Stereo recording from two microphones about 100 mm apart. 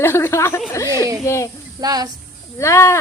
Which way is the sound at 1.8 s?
40° right (ahead or behind).